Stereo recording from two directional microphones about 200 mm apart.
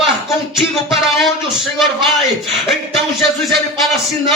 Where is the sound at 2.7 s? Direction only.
Centre (ahead or behind).